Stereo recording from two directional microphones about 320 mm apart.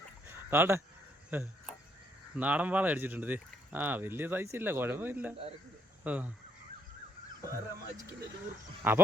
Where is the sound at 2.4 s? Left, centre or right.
Centre.